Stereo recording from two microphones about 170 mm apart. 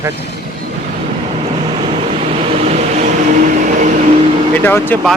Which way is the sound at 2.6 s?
45° right (ahead or behind).